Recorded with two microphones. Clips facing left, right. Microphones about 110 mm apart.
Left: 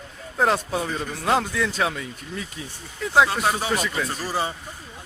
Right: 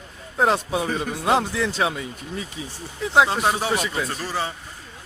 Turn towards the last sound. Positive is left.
turn(degrees=10)  # may be behind; listen again after turning